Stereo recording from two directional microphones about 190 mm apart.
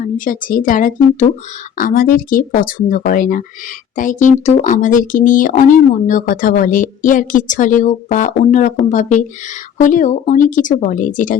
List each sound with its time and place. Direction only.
0.3 s speech: 45° left (ahead or behind)